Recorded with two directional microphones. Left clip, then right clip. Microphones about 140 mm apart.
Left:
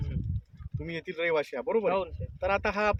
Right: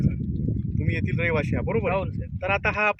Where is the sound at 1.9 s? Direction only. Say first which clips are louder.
Right 2 dB; 15° left (ahead or behind).